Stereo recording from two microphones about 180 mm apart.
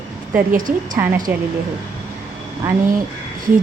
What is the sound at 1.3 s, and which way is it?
Speech, 10° right (ahead or behind).